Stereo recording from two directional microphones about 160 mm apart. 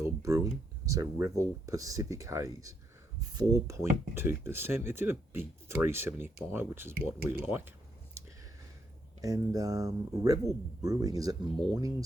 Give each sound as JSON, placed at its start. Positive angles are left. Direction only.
{"t": 0.0, "sound": "a sound", "side_deg": -20}
{"t": 0.9, "sound": "speech", "side_deg": -20}
{"t": 9.2, "sound": "speech", "side_deg": -20}